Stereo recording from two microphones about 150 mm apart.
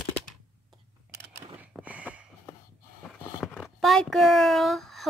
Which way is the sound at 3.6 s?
Centre (ahead or behind).